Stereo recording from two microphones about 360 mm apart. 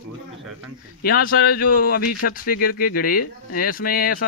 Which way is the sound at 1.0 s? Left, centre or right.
Left.